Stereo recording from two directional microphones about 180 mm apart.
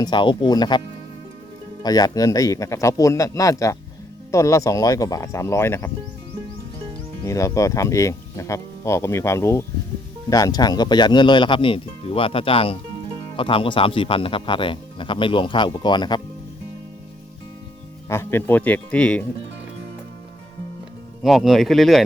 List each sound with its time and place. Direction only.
0.0 s speech: 25° left (ahead or behind)
1.8 s speech: 20° left (ahead or behind)
7.3 s speech: 15° left (ahead or behind)
18.1 s speech: 15° left (ahead or behind)
21.2 s speech: centre (ahead or behind)